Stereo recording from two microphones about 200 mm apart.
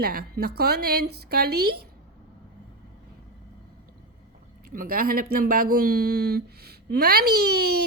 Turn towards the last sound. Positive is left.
turn(degrees=-55)  # may be behind; listen again after turning